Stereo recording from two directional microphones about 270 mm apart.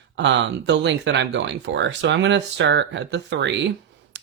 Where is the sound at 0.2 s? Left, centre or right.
Right.